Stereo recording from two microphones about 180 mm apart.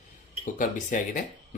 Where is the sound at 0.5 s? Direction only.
45° left (ahead or behind).